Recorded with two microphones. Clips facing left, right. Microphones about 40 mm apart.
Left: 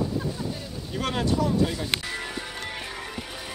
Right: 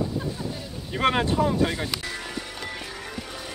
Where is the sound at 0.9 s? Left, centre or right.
Right.